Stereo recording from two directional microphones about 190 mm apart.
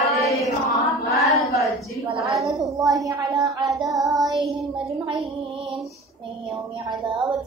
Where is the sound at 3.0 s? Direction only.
20° right (ahead or behind).